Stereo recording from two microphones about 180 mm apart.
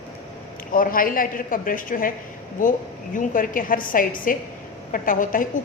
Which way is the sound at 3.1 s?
50° left (ahead or behind).